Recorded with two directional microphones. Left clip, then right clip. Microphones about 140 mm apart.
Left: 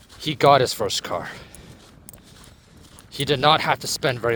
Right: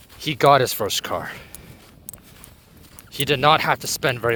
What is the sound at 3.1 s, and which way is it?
Speech, 45° right (ahead or behind).